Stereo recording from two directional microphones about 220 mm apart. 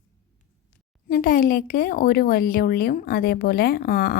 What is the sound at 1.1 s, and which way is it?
A woman's voice, 40° left (ahead or behind).